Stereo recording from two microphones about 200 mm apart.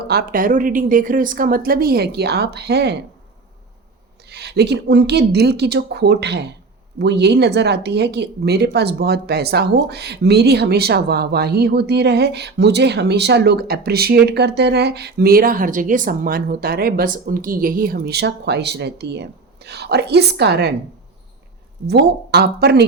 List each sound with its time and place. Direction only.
0.1 s a woman's voice: 50° right (ahead or behind)
4.3 s speech: 55° right (ahead or behind)
21.8 s speech: 55° right (ahead or behind)